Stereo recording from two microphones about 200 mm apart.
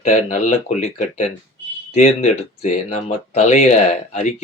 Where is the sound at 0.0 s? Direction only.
35° left (ahead or behind).